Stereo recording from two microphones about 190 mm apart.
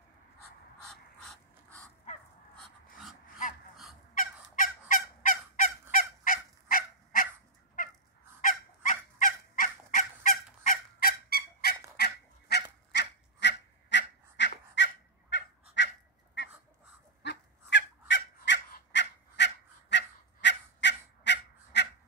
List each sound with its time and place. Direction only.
0.8 s mechanisms: 5° left (ahead or behind)
4.1 s fowl: 45° left (ahead or behind)
8.4 s fowl: 45° left (ahead or behind)
12.0 s goose: 60° left (ahead or behind)
14.8 s fowl: 65° left (ahead or behind)
15.8 s goose: 70° left (ahead or behind)
16.4 s dog: 65° left (ahead or behind)
17.2 s fowl: 65° left (ahead or behind)